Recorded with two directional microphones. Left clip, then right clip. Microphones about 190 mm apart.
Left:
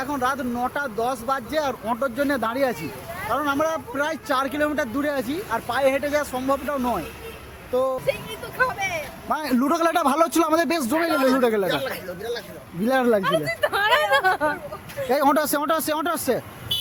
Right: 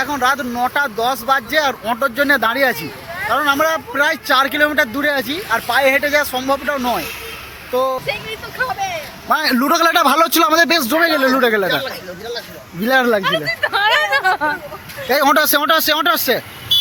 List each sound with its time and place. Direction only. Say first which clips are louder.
0.0 s speech: right 8 dB; centre (ahead or behind)
9.3 s speech: right 8 dB; centre (ahead or behind)
12.8 s speech: right 6 dB; centre (ahead or behind)
13.5 s a sound: right 6 dB; 60° left (ahead or behind)
15.1 s speech: right 7 dB; 15° left (ahead or behind)